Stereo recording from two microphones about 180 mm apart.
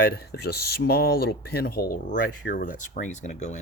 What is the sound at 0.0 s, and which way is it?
Speech, 65° left (ahead or behind).